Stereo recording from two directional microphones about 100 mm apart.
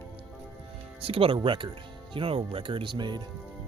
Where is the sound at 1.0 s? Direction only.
70° right (ahead or behind); by 3.2 s 50° right (ahead or behind).